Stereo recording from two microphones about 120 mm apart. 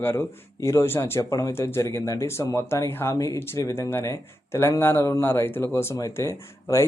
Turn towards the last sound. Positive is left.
turn(degrees=25)  # may be behind; listen again after turning